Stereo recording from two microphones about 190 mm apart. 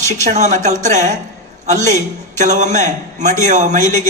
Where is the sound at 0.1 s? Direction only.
40° right (ahead or behind).